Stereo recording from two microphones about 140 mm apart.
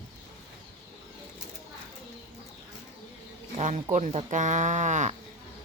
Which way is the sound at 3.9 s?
50° right (ahead or behind).